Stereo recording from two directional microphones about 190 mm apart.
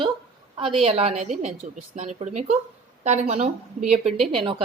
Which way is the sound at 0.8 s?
35° right (ahead or behind).